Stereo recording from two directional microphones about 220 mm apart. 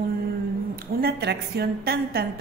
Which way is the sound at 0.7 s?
45° right (ahead or behind).